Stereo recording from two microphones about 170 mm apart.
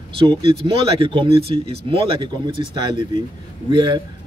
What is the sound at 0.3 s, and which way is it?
Speech, 35° right (ahead or behind).